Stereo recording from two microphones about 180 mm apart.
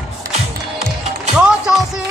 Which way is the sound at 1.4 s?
5° right (ahead or behind).